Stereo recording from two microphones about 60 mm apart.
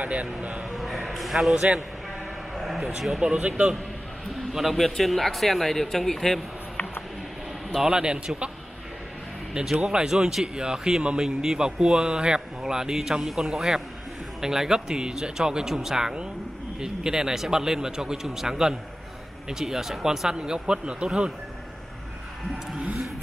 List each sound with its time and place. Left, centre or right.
0.0 s speech: right
0.7 s a sound: centre
1.5 s a man's voice: centre
2.5 s speech: centre
4.4 s speech: centre
7.7 s a man's voice: centre
9.8 s a man's voice: centre